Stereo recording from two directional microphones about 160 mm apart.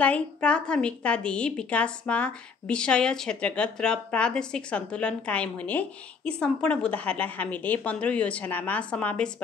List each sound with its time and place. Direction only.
0.0 s a woman's voice: 10° left (ahead or behind)